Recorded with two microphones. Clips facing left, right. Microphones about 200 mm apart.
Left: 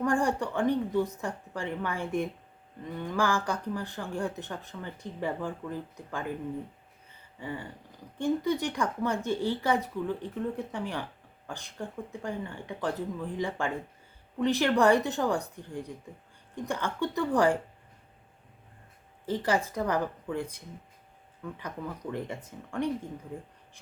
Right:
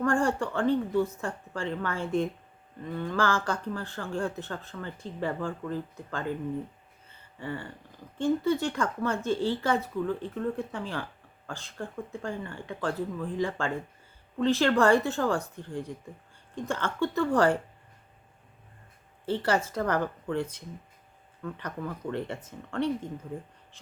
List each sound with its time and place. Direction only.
0.0 s speech: 15° left (ahead or behind)
7.1 s a sound: 15° left (ahead or behind)
8.2 s speech: 15° left (ahead or behind)
19.2 s speech: 15° left (ahead or behind)
22.1 s speech: 15° left (ahead or behind)